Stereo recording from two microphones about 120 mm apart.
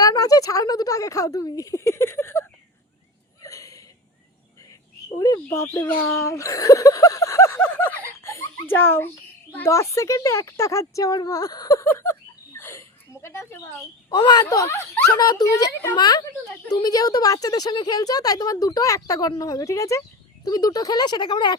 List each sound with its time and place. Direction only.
0.0 s speech: 30° left (ahead or behind)
3.4 s a sound: 30° left (ahead or behind)
5.2 s speech: 25° left (ahead or behind)
12.5 s a sound: 20° left (ahead or behind)
13.2 s speech: 20° left (ahead or behind)
14.2 s a woman's voice: 35° left (ahead or behind)